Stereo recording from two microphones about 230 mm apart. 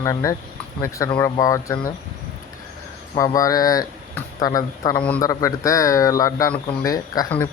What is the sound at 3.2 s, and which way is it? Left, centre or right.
Speech, centre.